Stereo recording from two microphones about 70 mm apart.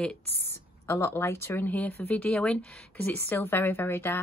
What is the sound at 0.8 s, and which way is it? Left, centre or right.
Speech, left.